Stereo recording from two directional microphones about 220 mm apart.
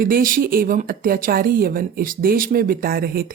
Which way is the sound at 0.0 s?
40° right (ahead or behind).